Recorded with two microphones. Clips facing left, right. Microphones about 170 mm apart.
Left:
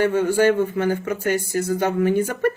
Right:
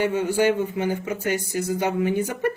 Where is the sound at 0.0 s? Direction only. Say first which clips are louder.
Left 3 dB; 15° right (ahead or behind).